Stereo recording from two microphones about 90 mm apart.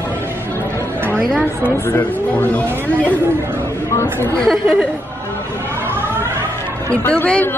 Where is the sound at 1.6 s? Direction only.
25° left (ahead or behind).